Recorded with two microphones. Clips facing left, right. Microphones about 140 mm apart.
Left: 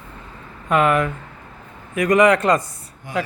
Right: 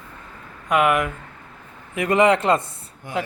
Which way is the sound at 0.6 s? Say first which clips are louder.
Left 1 dB; 10° right (ahead or behind).